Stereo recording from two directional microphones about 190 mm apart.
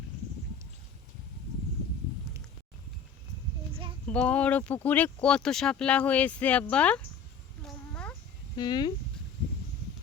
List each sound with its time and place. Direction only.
4.0 s speech: 5° left (ahead or behind)
7.6 s a sound: 5° left (ahead or behind)
8.5 s speech: 20° left (ahead or behind)